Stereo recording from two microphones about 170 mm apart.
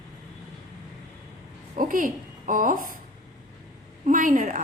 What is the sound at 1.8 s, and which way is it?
A woman's voice, 55° right (ahead or behind).